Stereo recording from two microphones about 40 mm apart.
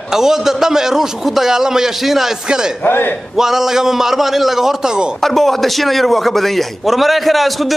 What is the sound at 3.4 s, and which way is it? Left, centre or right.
A man's voice, centre.